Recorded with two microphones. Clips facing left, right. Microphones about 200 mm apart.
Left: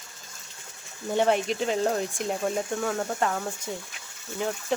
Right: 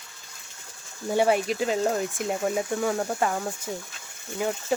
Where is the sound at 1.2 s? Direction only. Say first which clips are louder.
Right 1 dB; 5° right (ahead or behind).